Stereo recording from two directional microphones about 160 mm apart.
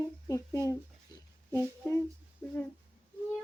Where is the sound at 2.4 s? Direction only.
15° left (ahead or behind).